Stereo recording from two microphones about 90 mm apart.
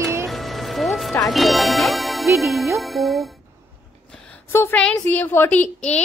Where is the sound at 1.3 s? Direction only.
Centre (ahead or behind).